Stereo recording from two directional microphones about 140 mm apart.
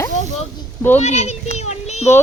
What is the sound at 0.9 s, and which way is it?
A child's voice, 55° left (ahead or behind).